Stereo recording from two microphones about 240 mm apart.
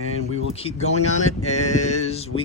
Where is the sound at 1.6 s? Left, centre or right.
Left.